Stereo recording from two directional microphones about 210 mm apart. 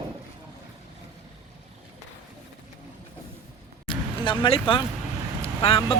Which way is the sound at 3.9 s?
20° left (ahead or behind).